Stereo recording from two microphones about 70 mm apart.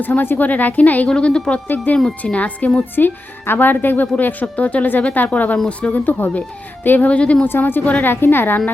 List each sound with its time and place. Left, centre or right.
0.0 s a woman's voice: left
1.6 s a woman's voice: left
2.9 s speech: left
7.1 s a woman's voice: centre
7.4 s speech: left